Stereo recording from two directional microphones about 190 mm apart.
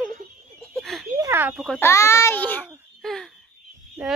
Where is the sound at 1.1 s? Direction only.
15° right (ahead or behind).